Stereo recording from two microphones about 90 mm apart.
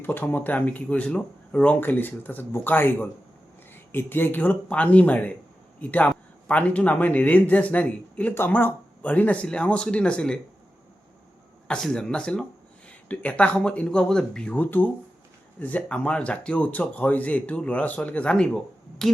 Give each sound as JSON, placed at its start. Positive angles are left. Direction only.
{"t": 0.0, "sound": "speech", "side_deg": 25}
{"t": 11.7, "sound": "speech", "side_deg": 10}
{"t": 14.5, "sound": "speech", "side_deg": 20}